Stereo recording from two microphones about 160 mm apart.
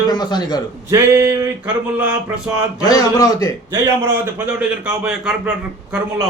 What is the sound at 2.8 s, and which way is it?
Speech, 25° left (ahead or behind).